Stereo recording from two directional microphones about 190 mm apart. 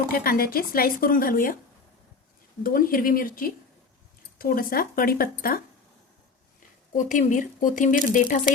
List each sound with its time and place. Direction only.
0.1 s speech: 50° left (ahead or behind)
2.6 s speech: 50° left (ahead or behind)
6.9 s speech: 40° left (ahead or behind)